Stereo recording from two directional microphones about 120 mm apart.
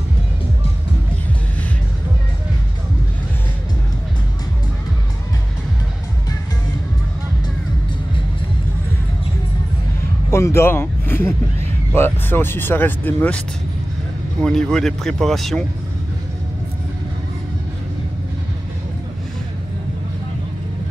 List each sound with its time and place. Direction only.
10.3 s speech: 20° left (ahead or behind)
14.4 s speech: 5° left (ahead or behind)